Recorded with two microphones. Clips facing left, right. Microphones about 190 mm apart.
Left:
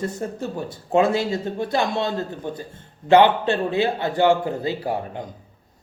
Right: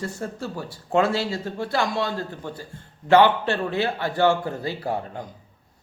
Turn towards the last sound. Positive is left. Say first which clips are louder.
# left 3 dB
turn(degrees=20)  # may be behind; listen again after turning